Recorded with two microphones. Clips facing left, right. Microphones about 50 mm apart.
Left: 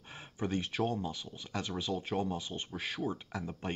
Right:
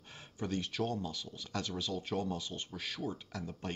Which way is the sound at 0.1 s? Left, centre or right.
Left.